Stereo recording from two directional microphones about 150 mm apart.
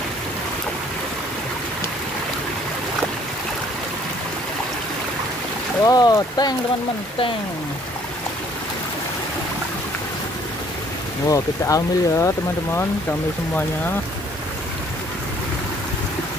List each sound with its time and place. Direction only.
5.9 s speech: 25° left (ahead or behind)
11.2 s speech: 20° left (ahead or behind)